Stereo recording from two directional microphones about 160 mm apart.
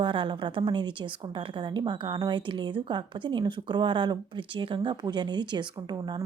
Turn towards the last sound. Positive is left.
turn(degrees=-25)  # may be behind; listen again after turning